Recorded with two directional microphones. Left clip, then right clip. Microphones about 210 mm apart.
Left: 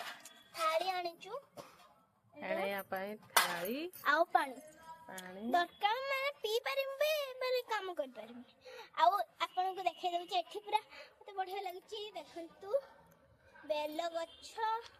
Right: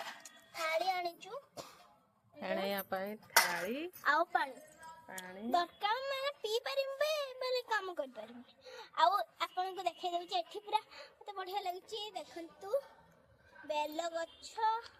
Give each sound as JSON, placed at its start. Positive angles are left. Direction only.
{"t": 0.5, "sound": "a sound", "side_deg": 5}
{"t": 2.4, "sound": "a sound", "side_deg": -25}
{"t": 3.7, "sound": "a woman's voice", "side_deg": 5}
{"t": 4.3, "sound": "a woman's voice", "side_deg": 30}
{"t": 5.0, "sound": "a woman's voice", "side_deg": 5}
{"t": 11.3, "sound": "speech", "side_deg": -45}
{"t": 13.7, "sound": "child singing", "side_deg": -20}
{"t": 13.9, "sound": "a woman's voice", "side_deg": 0}